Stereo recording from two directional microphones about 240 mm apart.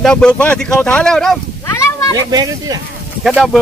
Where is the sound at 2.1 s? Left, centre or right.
Centre.